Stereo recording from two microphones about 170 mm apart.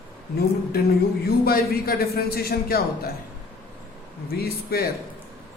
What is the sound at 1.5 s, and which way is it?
A man's voice, 60° left (ahead or behind).